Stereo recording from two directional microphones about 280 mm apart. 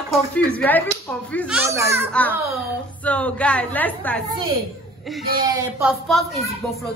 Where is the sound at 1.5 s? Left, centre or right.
Centre.